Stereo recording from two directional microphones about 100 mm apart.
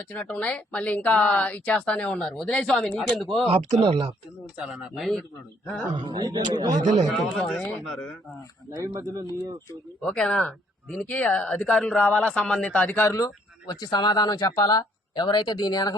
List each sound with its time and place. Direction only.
0.1 s speech: 10° left (ahead or behind)
3.4 s speech: 65° right (ahead or behind)
4.5 s speech: 5° right (ahead or behind)
6.0 s a man's voice: 45° right (ahead or behind)
7.1 s speech: centre (ahead or behind)
7.6 s speech: 20° left (ahead or behind)
8.7 s speech: 35° right (ahead or behind)
10.0 s speech: 5° left (ahead or behind)
13.7 s speech: 45° left (ahead or behind)